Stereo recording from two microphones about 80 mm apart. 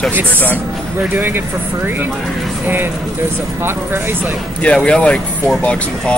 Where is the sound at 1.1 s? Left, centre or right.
Right.